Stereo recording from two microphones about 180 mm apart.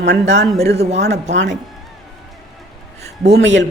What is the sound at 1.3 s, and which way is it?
Speech, 80° right.